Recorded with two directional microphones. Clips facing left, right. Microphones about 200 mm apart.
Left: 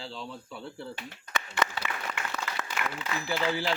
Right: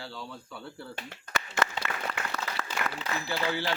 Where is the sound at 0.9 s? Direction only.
50° right (ahead or behind).